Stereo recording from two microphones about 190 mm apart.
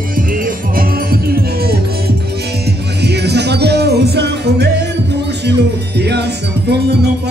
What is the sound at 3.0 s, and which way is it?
Music, 60° right (ahead or behind).